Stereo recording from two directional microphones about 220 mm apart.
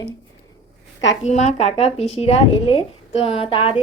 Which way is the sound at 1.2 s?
30° left (ahead or behind).